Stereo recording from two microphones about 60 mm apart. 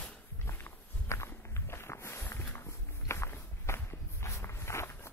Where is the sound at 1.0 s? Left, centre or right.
Left.